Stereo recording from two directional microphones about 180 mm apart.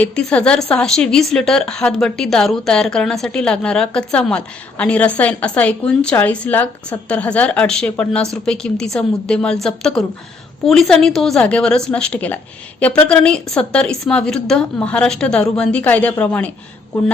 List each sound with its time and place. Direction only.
0.0 s speech: 5° left (ahead or behind)